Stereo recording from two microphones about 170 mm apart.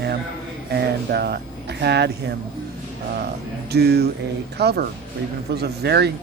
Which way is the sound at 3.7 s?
70° right (ahead or behind).